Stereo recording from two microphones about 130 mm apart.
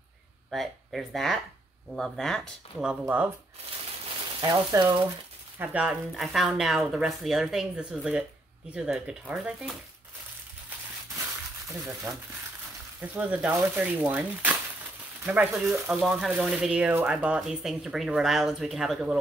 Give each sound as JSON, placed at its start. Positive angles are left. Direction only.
{"t": 0.5, "sound": "speech", "side_deg": 0}
{"t": 2.9, "sound": "speech", "side_deg": -10}
{"t": 4.4, "sound": "speech", "side_deg": -35}
{"t": 5.6, "sound": "speech", "side_deg": -10}
{"t": 12.1, "sound": "speech", "side_deg": -20}